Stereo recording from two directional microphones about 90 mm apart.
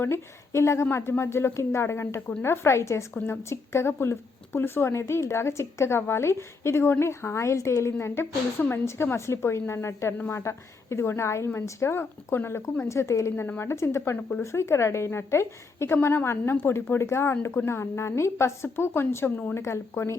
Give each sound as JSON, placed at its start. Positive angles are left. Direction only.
{"t": 0.0, "sound": "a woman's voice", "side_deg": 30}
{"t": 14.4, "sound": "a woman's voice", "side_deg": 30}